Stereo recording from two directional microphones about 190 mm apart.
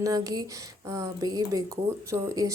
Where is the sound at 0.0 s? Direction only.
20° right (ahead or behind).